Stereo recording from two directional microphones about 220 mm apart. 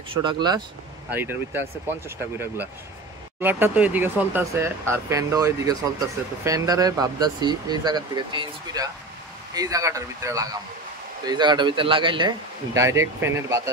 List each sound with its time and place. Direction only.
0.1 s a man's voice: 20° right (ahead or behind)
1.1 s a man's voice: 10° right (ahead or behind)